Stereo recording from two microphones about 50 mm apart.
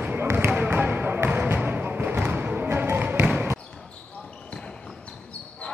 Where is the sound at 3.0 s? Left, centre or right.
Right.